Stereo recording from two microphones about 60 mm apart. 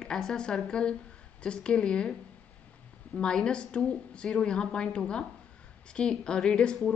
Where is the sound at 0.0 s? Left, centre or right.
Centre.